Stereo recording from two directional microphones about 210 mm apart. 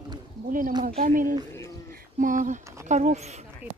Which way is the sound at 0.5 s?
40° right (ahead or behind).